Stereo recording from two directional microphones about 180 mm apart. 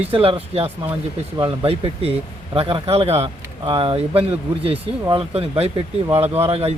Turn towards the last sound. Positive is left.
turn(degrees=-35)  # may be behind; listen again after turning